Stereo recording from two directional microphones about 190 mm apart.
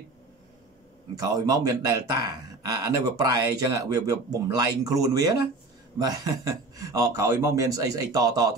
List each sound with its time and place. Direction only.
1.1 s speech: 20° right (ahead or behind)